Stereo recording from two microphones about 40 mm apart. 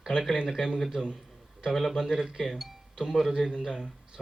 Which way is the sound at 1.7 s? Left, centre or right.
Centre.